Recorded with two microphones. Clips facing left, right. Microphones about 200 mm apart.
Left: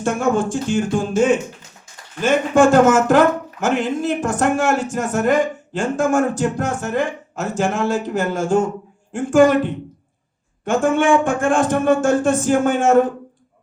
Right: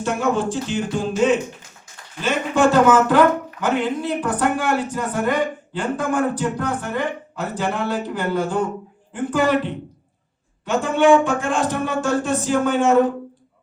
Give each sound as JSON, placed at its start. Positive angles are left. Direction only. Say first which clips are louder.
{"t": 0.0, "sound": "speech", "louder": "left 2 dB", "side_deg": 50}